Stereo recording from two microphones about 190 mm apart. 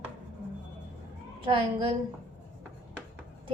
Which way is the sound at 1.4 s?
25° right (ahead or behind).